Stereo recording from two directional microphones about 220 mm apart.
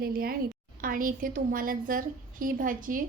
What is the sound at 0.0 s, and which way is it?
A woman's voice, 45° right (ahead or behind).